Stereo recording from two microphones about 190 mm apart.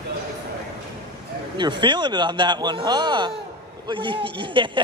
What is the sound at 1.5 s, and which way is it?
Speech, 25° right (ahead or behind).